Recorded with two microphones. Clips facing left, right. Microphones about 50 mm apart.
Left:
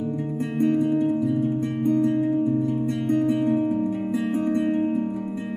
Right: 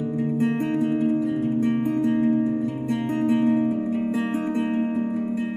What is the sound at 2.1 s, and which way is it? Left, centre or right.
Music, right.